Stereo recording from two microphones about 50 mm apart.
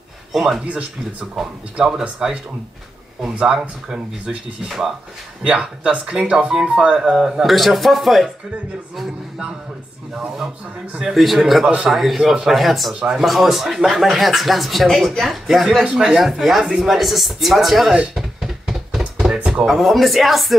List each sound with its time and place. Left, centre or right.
0.3 s speech: centre
5.4 s speech: right
7.4 s speech: centre
11.1 s speech: centre
15.8 s speech: centre
16.2 s speech: centre
18.1 s a sound: centre
19.3 s drawer open or close: centre
19.6 s speech: centre